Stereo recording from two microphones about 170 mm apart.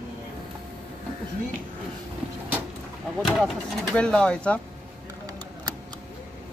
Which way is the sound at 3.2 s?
Centre (ahead or behind).